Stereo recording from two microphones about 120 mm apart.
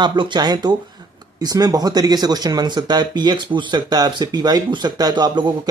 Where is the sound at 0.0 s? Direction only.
40° right (ahead or behind).